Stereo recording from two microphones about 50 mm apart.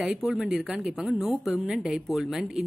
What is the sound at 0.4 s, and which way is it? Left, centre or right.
A woman's voice, centre.